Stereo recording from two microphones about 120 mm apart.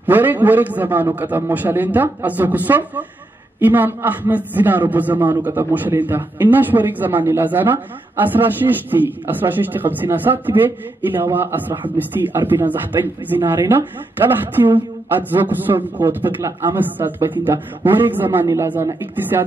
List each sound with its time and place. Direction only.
0.0 s a man's voice: 15° right (ahead or behind)
14.6 s a woman's voice: 25° right (ahead or behind)